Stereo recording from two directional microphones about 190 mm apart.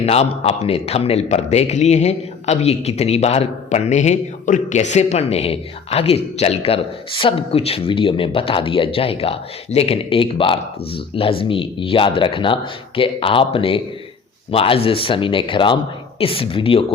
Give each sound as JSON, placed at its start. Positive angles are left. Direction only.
{"t": 0.0, "sound": "a man's voice", "side_deg": 35}